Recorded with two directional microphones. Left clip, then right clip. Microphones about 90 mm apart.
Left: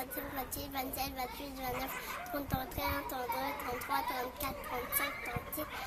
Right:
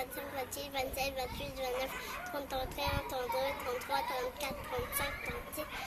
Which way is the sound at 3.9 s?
60° left (ahead or behind).